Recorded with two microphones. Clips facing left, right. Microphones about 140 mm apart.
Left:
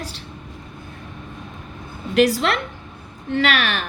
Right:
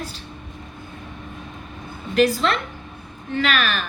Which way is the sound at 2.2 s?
75° left (ahead or behind).